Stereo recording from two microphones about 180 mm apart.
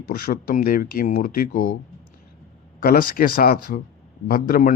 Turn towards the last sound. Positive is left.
turn(degrees=55)  # may be behind; listen again after turning